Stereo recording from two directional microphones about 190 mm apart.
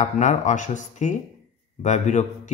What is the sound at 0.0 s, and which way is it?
Speech, 40° left (ahead or behind).